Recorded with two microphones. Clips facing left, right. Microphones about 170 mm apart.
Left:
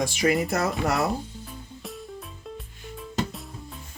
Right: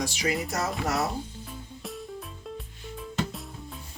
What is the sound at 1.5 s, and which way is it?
Music, centre (ahead or behind).